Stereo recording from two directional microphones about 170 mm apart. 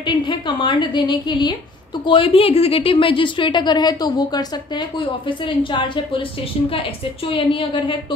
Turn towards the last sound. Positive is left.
turn(degrees=30)  # may be behind; listen again after turning